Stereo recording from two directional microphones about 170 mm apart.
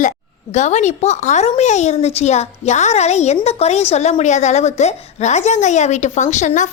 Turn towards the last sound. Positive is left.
turn(degrees=45)  # may be behind; listen again after turning